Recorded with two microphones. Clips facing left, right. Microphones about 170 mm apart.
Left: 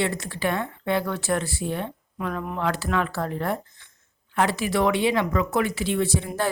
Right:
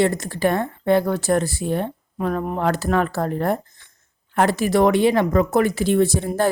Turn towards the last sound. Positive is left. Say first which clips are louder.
# right 6 dB
turn(degrees=-40)  # may be behind; listen again after turning